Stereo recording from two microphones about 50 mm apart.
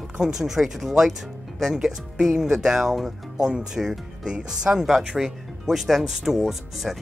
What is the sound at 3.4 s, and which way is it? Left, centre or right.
Speech, centre.